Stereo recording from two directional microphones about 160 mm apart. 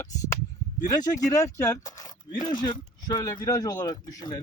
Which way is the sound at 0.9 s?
20° left (ahead or behind).